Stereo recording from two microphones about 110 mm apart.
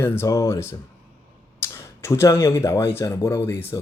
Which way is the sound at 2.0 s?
25° left (ahead or behind).